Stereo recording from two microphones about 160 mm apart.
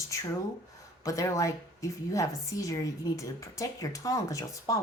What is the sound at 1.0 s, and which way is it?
A woman's voice, 20° left (ahead or behind).